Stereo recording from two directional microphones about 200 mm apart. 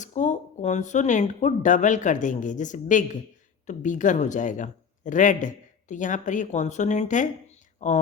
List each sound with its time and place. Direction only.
0.0 s speech: 40° left (ahead or behind)